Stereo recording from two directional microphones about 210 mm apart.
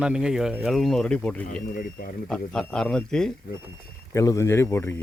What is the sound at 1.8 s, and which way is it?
Speech, 45° left (ahead or behind).